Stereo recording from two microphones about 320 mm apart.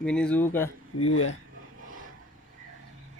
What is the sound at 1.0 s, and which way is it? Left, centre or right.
Speech, left.